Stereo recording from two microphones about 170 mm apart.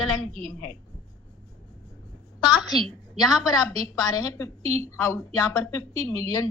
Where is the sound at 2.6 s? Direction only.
Centre (ahead or behind).